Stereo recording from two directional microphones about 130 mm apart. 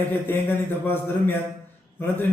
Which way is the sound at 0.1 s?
15° left (ahead or behind).